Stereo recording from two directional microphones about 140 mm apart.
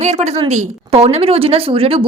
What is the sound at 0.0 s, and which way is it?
Speech, 55° right (ahead or behind).